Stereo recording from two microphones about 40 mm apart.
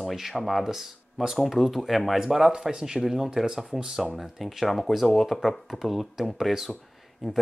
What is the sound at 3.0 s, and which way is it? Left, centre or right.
Speech, centre.